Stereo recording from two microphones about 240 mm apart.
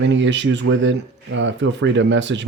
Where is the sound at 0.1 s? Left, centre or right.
Right.